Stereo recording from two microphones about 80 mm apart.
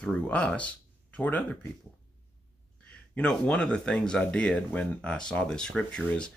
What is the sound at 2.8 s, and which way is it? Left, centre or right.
Speech, centre.